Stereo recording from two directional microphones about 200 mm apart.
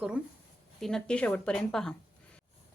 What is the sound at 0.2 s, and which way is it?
Speech, 5° right (ahead or behind).